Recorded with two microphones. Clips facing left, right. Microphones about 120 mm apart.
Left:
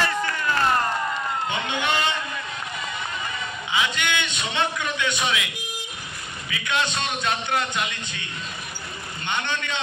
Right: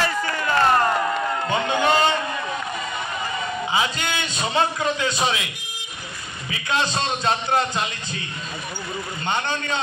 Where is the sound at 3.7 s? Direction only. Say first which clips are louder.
Left 1 dB; 35° right (ahead or behind).